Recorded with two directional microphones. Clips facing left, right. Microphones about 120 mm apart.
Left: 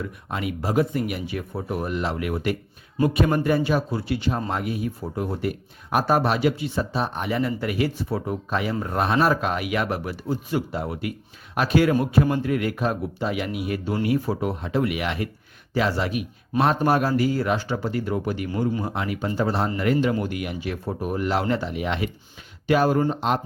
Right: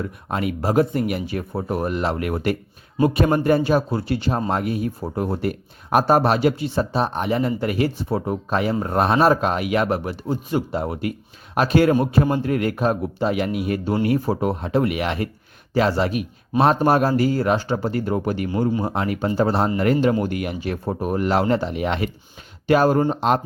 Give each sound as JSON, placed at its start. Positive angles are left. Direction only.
{"t": 0.3, "sound": "speech", "side_deg": -40}
{"t": 3.0, "sound": "speech", "side_deg": -35}